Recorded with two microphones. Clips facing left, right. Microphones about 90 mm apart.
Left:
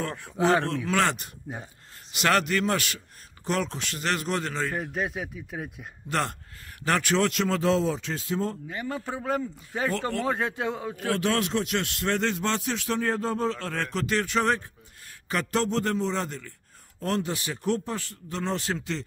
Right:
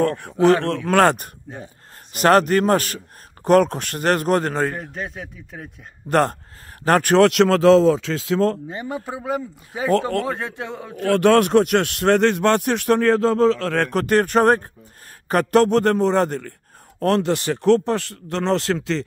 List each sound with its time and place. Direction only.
0.0 s a man's voice: 55° right (ahead or behind)
4.7 s speech: 5° left (ahead or behind)
6.0 s a man's voice: 50° right (ahead or behind)
7.2 s speech: 75° right (ahead or behind); by 8.5 s 90° right
8.6 s speech: 20° right (ahead or behind); by 11.1 s centre (ahead or behind)
11.1 s speech: 60° right (ahead or behind)
17.0 s speech: 70° right (ahead or behind); by 19.0 s 90° right